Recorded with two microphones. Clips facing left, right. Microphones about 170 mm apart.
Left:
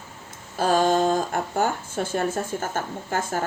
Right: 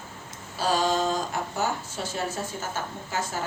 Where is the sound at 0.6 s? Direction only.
55° left (ahead or behind).